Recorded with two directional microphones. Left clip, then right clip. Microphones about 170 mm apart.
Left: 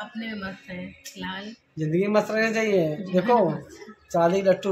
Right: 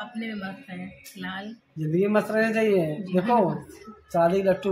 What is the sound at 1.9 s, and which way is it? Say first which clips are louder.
Speech: left 1 dB; 15° left (ahead or behind).